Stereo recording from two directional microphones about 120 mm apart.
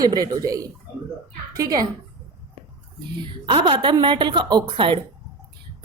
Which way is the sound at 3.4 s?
45° right (ahead or behind).